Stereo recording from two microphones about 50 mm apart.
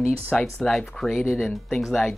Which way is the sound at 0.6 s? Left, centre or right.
Centre.